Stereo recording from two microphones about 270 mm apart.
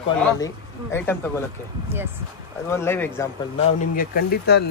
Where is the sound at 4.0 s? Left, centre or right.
Left.